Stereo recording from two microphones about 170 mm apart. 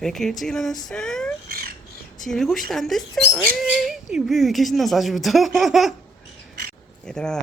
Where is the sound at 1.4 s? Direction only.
65° right (ahead or behind).